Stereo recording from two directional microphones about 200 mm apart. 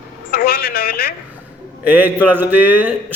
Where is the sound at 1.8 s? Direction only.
10° right (ahead or behind).